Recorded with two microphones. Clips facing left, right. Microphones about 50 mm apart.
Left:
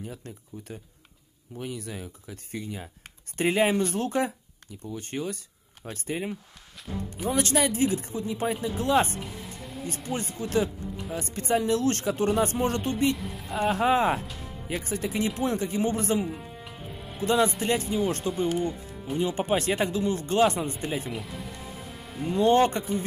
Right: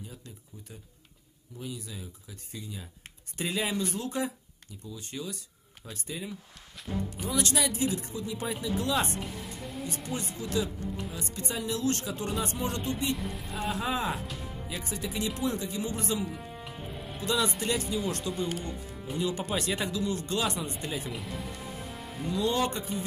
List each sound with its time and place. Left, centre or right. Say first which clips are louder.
0.0 s speech: left 7 dB; left
7.3 s speech: left 4 dB; left
9.2 s music: even; centre
9.8 s speech: left 5 dB; left
13.1 s a sound: left 1 dB; centre
13.7 s speech: left 8 dB; left
16.6 s music: even; centre
17.2 s speech: left 6 dB; left
21.1 s speech: left 2 dB; centre
21.9 s music: left 5 dB; centre
22.3 s speech: left 8 dB; left